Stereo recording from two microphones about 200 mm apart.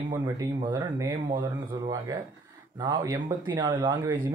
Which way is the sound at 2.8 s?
25° right (ahead or behind).